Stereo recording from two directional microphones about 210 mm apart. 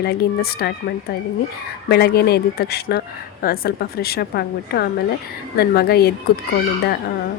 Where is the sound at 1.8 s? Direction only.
50° left (ahead or behind).